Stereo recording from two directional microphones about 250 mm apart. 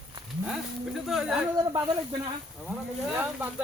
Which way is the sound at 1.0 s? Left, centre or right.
Centre.